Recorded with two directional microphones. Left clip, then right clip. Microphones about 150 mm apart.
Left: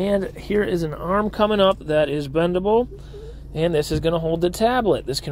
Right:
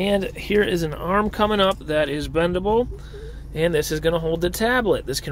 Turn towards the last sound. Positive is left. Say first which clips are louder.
# even
turn(degrees=0)  # may be behind; listen again after turning